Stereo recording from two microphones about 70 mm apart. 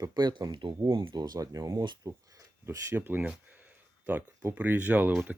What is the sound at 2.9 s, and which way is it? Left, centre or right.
Speech, right.